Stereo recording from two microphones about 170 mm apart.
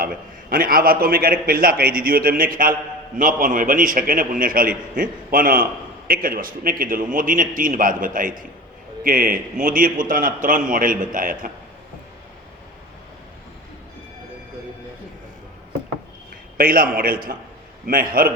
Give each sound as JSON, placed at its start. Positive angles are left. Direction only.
{"t": 0.0, "sound": "a man's voice", "side_deg": -55}
{"t": 16.6, "sound": "a man's voice", "side_deg": -55}